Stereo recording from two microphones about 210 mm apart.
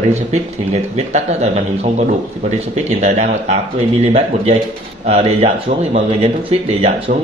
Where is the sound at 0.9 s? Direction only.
30° right (ahead or behind).